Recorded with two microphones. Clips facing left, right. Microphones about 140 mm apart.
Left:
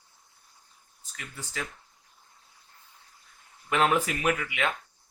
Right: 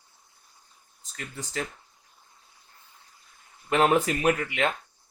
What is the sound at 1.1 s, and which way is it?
Speech, 35° right (ahead or behind).